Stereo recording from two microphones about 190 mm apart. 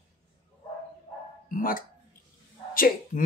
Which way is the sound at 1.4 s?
45° left (ahead or behind).